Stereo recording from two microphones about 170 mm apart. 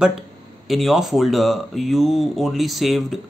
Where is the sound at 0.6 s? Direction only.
Centre (ahead or behind).